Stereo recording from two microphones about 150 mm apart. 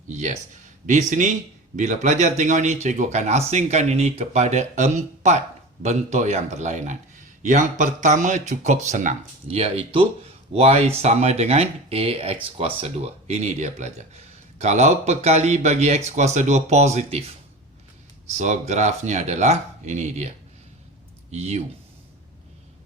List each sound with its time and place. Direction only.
0.1 s speech: 55° right (ahead or behind)
18.3 s speech: 55° right (ahead or behind)
21.3 s speech: 45° right (ahead or behind)